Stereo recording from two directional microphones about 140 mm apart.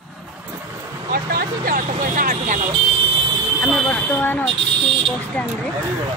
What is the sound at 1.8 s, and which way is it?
Vehicle, 70° right (ahead or behind).